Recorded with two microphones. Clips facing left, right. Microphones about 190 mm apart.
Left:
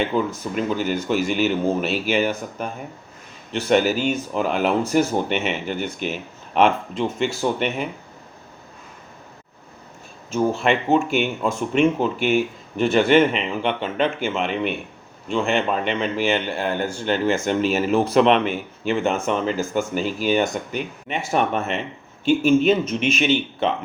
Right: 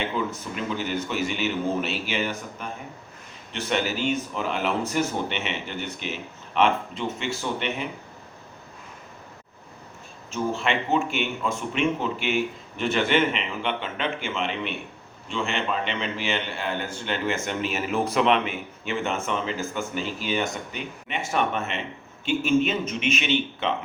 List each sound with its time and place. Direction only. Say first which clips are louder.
0.1 s a man's voice: left 6 dB; 40° left (ahead or behind)
10.3 s a man's voice: left 6 dB; 45° left (ahead or behind)